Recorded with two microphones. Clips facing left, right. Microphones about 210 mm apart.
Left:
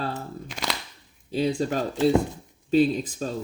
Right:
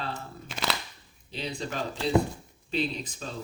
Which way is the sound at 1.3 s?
45° left (ahead or behind).